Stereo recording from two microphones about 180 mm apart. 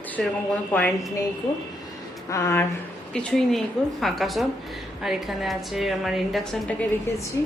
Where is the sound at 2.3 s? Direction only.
15° left (ahead or behind).